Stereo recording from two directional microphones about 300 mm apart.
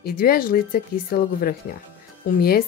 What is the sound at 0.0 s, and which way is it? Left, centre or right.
Speech, left.